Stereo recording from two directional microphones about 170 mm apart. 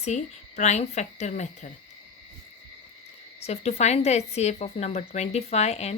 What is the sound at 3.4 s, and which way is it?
Speech, 40° left (ahead or behind).